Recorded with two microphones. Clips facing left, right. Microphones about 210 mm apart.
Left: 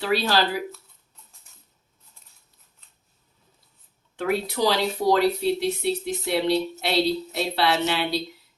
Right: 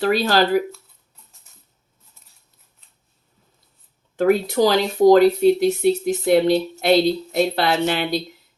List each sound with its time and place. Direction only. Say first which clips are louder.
0.0 s speech: right 5 dB; 45° right (ahead or behind)
4.2 s speech: right 7 dB; 45° right (ahead or behind)